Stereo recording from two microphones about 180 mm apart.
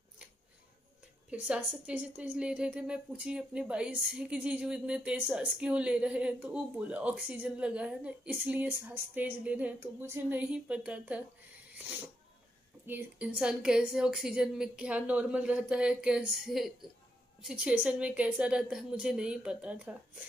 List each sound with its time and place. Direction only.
1.3 s a woman's voice: 5° right (ahead or behind)